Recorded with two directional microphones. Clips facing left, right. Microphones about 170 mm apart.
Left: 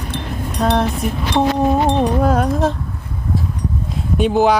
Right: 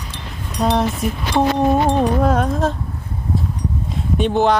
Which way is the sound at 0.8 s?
Centre (ahead or behind).